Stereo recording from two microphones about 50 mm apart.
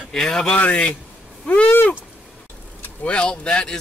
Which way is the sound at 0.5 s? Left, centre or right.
Left.